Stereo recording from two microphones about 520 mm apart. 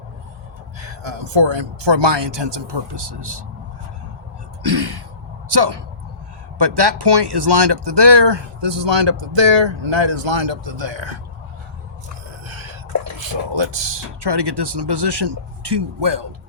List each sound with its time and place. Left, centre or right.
1.3 s speech: right
4.6 s gasp: right
5.5 s speech: right
12.5 s a sound: right
13.1 s speech: right